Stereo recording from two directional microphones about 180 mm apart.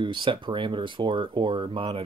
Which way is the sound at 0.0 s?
25° right (ahead or behind).